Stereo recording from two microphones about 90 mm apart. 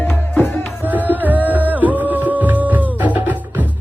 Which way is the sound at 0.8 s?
20° right (ahead or behind).